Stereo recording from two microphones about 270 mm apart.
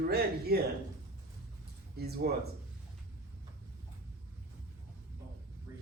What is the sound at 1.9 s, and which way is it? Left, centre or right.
Speech, right.